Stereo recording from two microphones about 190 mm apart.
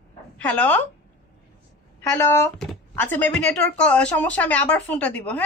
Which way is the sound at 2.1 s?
15° left (ahead or behind).